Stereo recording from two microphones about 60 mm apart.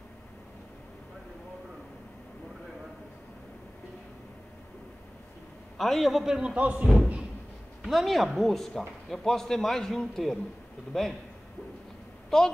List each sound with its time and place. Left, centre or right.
5.8 s a man's voice: centre
6.4 s speech: right
7.0 s a sound: centre
7.9 s a man's voice: centre
12.3 s a woman's voice: centre